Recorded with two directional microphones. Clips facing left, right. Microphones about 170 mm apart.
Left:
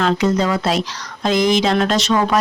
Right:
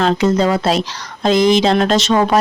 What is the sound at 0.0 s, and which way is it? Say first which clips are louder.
Speech: right 3 dB; 30° right (ahead or behind).